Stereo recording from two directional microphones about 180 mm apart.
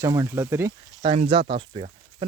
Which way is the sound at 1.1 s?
25° right (ahead or behind).